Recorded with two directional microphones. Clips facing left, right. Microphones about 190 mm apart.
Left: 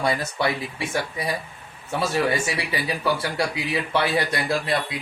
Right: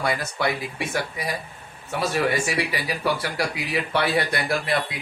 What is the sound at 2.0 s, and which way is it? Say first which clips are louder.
Speech: even; 25° left (ahead or behind).